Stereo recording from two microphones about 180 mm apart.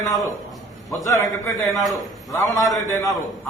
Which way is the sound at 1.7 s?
Centre (ahead or behind).